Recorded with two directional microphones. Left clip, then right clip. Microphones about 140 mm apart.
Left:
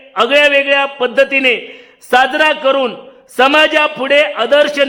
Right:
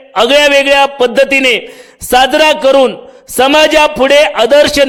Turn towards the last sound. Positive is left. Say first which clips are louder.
# right 4 dB
turn(degrees=-40)  # may be behind; listen again after turning